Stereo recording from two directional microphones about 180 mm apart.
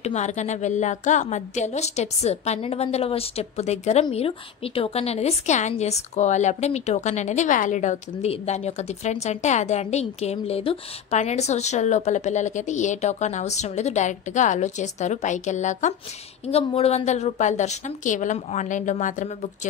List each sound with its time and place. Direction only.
0.0 s a woman's voice: 40° left (ahead or behind)